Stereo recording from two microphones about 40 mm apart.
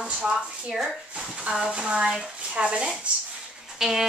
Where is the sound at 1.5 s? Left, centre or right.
Right.